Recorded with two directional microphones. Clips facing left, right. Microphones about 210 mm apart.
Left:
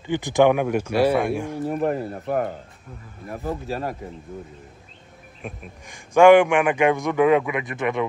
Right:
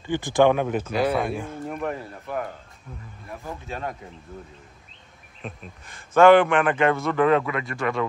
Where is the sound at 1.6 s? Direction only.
35° left (ahead or behind).